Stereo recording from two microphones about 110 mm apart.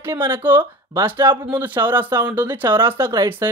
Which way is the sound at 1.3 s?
50° right (ahead or behind).